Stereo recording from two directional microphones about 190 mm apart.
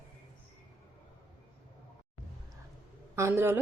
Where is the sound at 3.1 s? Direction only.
15° right (ahead or behind).